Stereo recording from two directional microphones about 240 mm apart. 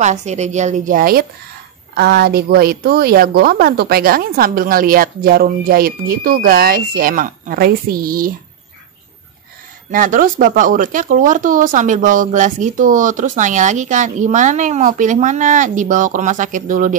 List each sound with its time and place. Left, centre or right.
0.0 s a woman's voice: right
9.8 s speech: right